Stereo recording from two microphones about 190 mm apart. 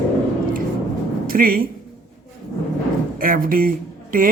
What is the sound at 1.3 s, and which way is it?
Speech, 50° right (ahead or behind).